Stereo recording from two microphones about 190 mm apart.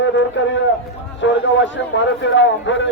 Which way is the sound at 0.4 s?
75° left (ahead or behind).